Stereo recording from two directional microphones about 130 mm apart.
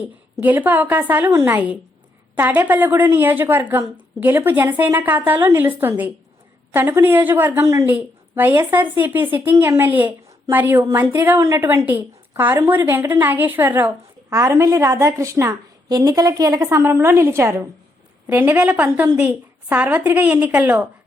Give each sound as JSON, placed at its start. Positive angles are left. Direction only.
{"t": 0.0, "sound": "a woman's voice", "side_deg": -15}